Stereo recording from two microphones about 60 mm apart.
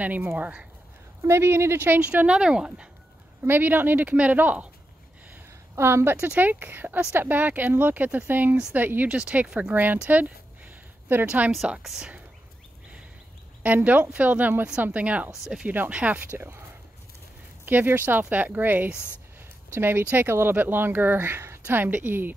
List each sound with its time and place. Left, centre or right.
0.0 s speech: right
1.2 s speech: right
2.0 s speech: right
3.4 s speech: right
5.8 s speech: right
6.2 s speech: right
11.8 s speech: centre
13.6 s speech: right
16.3 s speech: right
17.6 s speech: right
21.6 s speech: right